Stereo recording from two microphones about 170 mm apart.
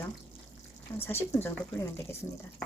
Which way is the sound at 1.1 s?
15° left (ahead or behind).